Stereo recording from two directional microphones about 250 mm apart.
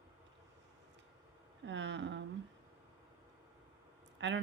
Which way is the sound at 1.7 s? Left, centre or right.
Right.